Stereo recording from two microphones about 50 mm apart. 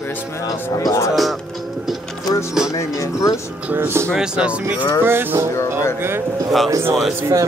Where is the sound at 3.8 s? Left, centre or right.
Right.